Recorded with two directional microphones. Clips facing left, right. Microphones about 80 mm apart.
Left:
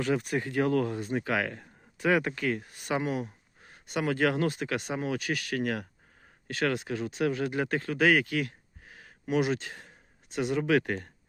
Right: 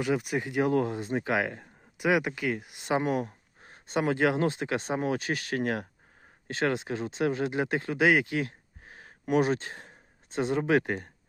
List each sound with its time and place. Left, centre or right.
0.0 s speech: centre
3.0 s speech: right